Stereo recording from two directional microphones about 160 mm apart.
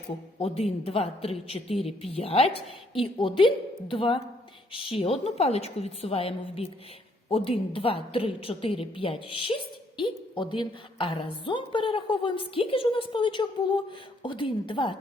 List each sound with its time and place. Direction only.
0.3 s a woman's voice: 40° left (ahead or behind)